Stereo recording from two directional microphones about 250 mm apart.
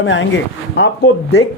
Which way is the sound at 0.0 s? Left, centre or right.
Left.